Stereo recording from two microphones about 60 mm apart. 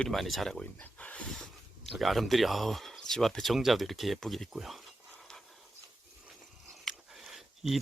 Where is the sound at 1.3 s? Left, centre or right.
Centre.